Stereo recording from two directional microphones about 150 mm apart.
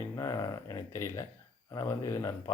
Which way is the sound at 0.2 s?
25° left (ahead or behind).